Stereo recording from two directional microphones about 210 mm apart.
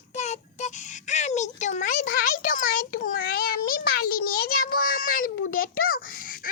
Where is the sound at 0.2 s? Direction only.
35° left (ahead or behind).